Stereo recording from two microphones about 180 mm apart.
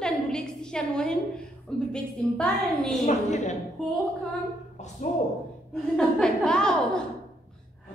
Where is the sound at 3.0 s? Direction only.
40° left (ahead or behind).